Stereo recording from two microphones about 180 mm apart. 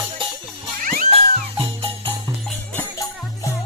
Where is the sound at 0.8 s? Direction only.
50° right (ahead or behind).